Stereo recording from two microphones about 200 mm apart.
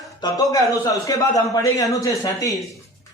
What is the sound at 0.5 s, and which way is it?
A man's voice, 15° left (ahead or behind).